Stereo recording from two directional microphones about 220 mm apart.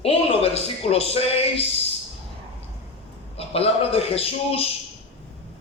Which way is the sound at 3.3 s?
25° left (ahead or behind).